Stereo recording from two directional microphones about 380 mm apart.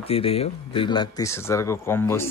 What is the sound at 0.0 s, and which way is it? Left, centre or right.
Speech, centre.